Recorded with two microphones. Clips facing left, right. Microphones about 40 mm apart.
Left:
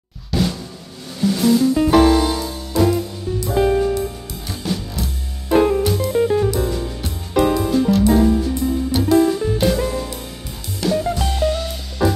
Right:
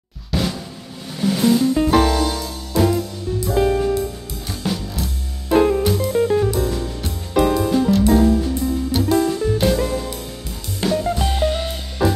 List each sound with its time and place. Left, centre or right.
0.3 s drum: centre
1.2 s music: centre
1.8 s music: centre
2.8 s music: centre
11.2 s music: centre
12.0 s music: centre